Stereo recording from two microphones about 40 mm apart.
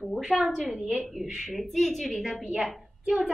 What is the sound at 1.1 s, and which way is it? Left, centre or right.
A woman's voice, centre.